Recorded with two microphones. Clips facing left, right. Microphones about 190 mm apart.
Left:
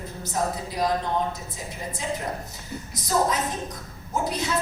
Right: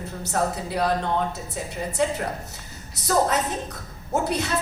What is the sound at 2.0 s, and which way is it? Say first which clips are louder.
Speech: right 7 dB; 65° right (ahead or behind).